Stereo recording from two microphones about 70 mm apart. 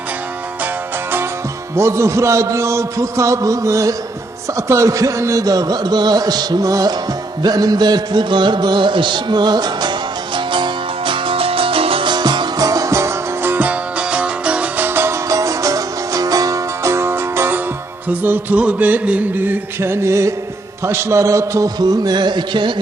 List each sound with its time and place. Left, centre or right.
1.7 s a man's voice: right
7.4 s music: right
12.0 s music: right
12.6 s music: right
13.5 s music: right
14.8 s music: right
15.3 s music: right
20.8 s a man's voice: right
21.8 s music: right